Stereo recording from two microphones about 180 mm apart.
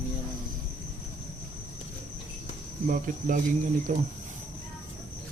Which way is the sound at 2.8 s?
45° right (ahead or behind).